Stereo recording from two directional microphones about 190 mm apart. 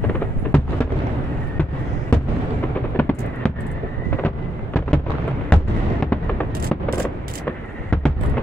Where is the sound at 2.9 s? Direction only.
10° left (ahead or behind).